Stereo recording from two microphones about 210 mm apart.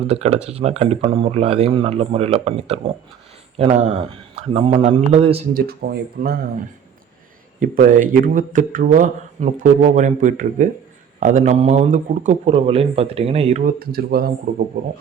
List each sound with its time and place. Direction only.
0.1 s speech: 30° right (ahead or behind)
5.5 s speech: 45° right (ahead or behind)
7.6 s speech: 40° right (ahead or behind)
13.7 s speech: 45° right (ahead or behind)